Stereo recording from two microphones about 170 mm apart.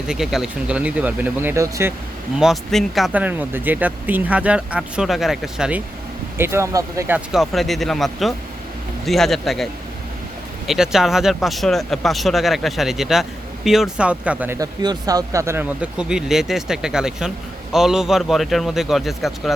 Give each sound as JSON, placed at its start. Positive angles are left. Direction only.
{"t": 0.1, "sound": "speech", "side_deg": 0}
{"t": 2.4, "sound": "speech", "side_deg": 0}
{"t": 6.3, "sound": "speech", "side_deg": -15}
{"t": 7.3, "sound": "speech", "side_deg": 0}
{"t": 10.7, "sound": "speech", "side_deg": 0}